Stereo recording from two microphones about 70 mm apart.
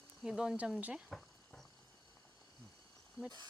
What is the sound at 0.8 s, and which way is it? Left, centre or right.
Speech, right.